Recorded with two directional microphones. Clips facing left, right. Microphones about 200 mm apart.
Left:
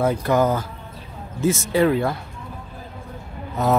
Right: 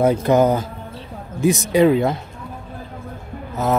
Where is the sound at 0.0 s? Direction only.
20° right (ahead or behind).